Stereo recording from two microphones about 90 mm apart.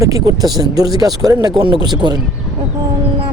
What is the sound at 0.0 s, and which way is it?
Speech, 40° right (ahead or behind).